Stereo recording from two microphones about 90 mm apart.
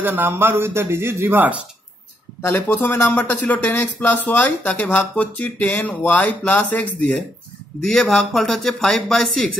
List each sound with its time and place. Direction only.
0.0 s speech: 25° right (ahead or behind)
2.4 s speech: 20° left (ahead or behind)
7.8 s a man's voice: 5° left (ahead or behind)